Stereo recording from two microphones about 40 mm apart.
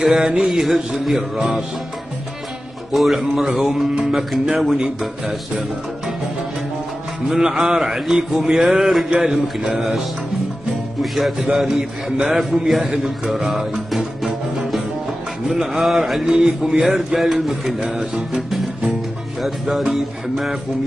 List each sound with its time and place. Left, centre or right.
0.1 s a man's voice: right
0.5 s a man's voice: centre
2.9 s a man's voice: centre
7.2 s a man's voice: centre
11.0 s a man's voice: centre
12.8 s music: centre
15.4 s a man's voice: centre
16.3 s a man's voice: right
16.9 s music: centre
17.9 s a man's voice: centre
19.4 s music: centre